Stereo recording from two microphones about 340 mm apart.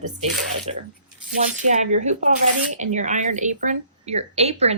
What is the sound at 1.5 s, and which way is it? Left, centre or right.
A woman's voice, right.